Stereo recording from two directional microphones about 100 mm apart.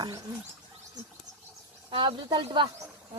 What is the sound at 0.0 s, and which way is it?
Speech, 45° right (ahead or behind).